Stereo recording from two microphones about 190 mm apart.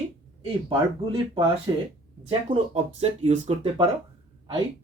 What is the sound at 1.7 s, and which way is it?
Speech, 25° right (ahead or behind).